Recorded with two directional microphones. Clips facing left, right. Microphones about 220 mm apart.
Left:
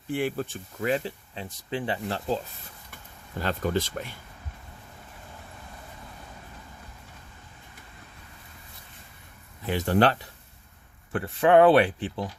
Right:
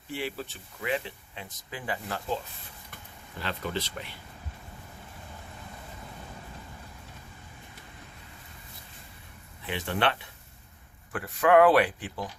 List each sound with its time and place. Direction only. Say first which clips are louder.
0.1 s speech: left 7 dB; 50° left (ahead or behind); by 2.4 s 30° left (ahead or behind)
3.3 s speech: left 6 dB; 45° left (ahead or behind)
9.6 s speech: left 6 dB; 40° left (ahead or behind)
11.1 s speech: left 2 dB; 25° left (ahead or behind)